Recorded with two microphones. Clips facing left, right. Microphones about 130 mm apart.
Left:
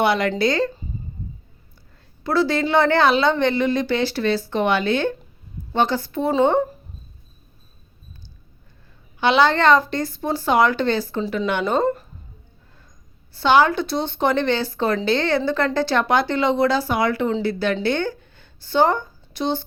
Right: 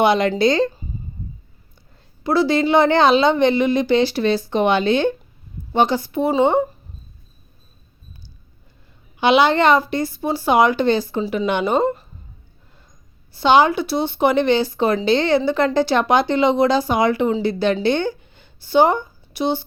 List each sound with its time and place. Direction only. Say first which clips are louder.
0.0 s speech: right 3 dB; 20° right (ahead or behind)
2.2 s speech: right 3 dB; 15° right (ahead or behind)
9.2 s speech: right 2 dB; 15° right (ahead or behind)
13.3 s a woman's voice: right 2 dB; 15° right (ahead or behind)